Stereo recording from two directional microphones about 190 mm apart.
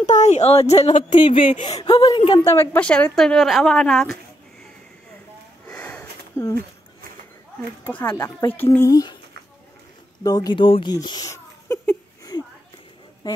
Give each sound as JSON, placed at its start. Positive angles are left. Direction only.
{"t": 0.0, "sound": "a woman's voice", "side_deg": 40}
{"t": 5.7, "sound": "sniff", "side_deg": 10}
{"t": 7.8, "sound": "a woman's voice", "side_deg": 10}
{"t": 10.2, "sound": "speech", "side_deg": 20}